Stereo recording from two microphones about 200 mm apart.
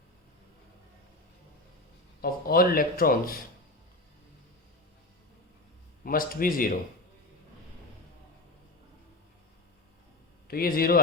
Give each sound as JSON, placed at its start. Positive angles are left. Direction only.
{"t": 2.2, "sound": "speech", "side_deg": 50}
{"t": 6.1, "sound": "speech", "side_deg": 45}
{"t": 10.5, "sound": "speech", "side_deg": 50}